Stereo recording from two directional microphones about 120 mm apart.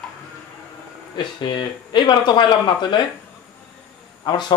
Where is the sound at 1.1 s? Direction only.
40° left (ahead or behind).